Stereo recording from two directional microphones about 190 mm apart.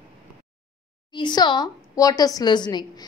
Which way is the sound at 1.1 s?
25° left (ahead or behind).